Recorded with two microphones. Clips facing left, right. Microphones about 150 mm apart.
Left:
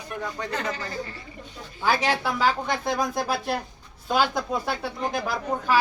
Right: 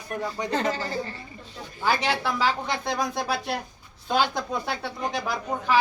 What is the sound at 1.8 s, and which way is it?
A woman's voice, 5° left (ahead or behind).